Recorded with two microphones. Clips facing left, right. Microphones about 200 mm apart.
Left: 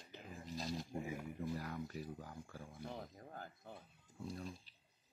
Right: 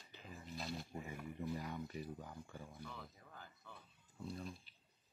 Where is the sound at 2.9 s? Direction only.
45° left (ahead or behind).